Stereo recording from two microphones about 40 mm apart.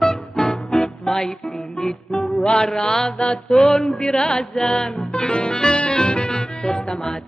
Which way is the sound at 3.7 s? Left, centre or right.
Centre.